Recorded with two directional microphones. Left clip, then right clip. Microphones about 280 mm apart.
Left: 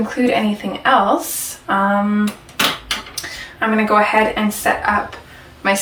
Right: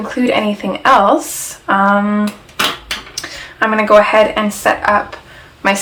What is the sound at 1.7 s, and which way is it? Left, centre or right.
Speech, centre.